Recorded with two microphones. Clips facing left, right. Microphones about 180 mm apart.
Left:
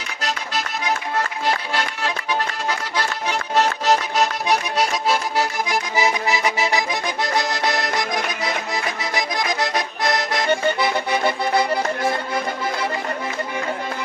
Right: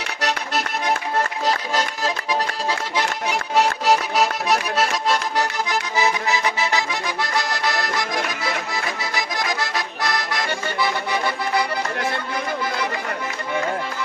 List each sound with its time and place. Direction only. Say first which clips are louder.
0.2 s accordion: right 2 dB; 65° right (ahead or behind)
1.7 s music: right 1 dB; 40° right (ahead or behind)
2.6 s accordion: right 1 dB; 25° right (ahead or behind)
3.2 s accordion: even; 10° right (ahead or behind); by 10.9 s 20° left (ahead or behind)